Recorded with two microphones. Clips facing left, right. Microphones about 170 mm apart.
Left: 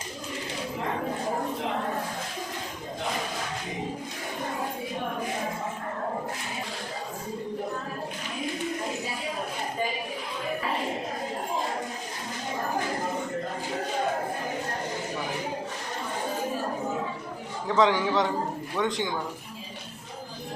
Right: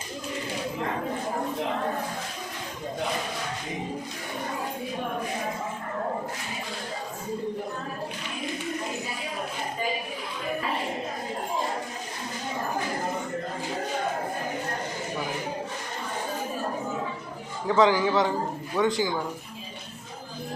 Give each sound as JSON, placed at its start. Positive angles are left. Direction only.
{"t": 17.7, "sound": "a man's voice", "side_deg": 0}